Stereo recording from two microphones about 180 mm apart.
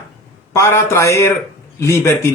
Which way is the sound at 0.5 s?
15° left (ahead or behind).